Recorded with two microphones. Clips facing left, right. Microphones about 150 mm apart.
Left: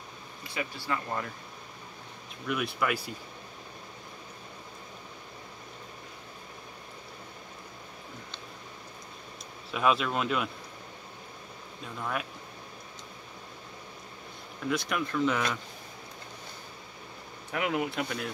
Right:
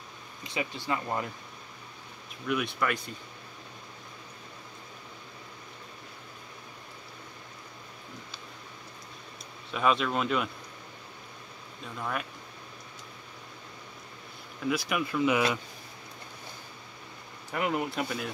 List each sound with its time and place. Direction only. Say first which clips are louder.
0.4 s speech: right 2 dB; 20° right (ahead or behind)
2.4 s speech: right 1 dB; centre (ahead or behind)
9.7 s speech: even; centre (ahead or behind)
12.0 s speech: even; centre (ahead or behind)
14.7 s speech: right 1 dB; 5° right (ahead or behind)
17.5 s speech: even; centre (ahead or behind)